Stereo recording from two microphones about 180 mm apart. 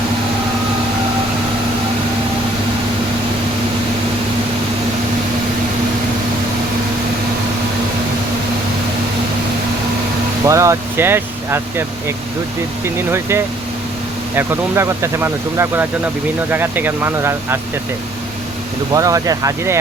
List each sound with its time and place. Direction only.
10.4 s speech: 15° right (ahead or behind)
18.9 s speech: 20° right (ahead or behind)